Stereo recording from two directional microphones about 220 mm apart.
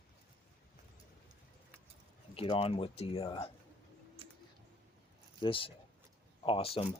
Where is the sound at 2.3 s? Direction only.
25° left (ahead or behind).